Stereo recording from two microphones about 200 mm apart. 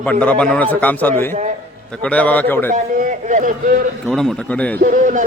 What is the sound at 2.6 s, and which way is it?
A man's voice, 40° right (ahead or behind).